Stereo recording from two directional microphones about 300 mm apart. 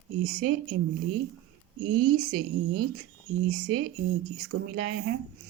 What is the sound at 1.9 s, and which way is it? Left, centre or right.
A woman's voice, right.